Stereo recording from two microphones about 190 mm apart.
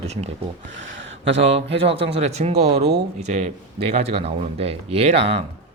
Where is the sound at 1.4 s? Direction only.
30° right (ahead or behind).